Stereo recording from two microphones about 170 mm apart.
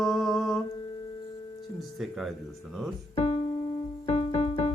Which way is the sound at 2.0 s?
Centre (ahead or behind).